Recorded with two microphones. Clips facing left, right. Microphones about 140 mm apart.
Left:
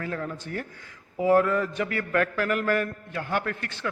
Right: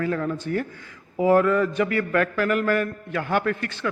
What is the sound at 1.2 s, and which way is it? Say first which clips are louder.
Speech: right 3 dB; 90° right.